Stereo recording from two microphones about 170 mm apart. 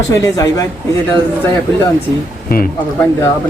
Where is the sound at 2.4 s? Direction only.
55° left (ahead or behind).